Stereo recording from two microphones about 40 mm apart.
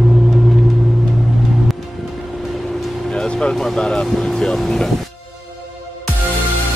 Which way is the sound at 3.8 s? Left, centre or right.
Left.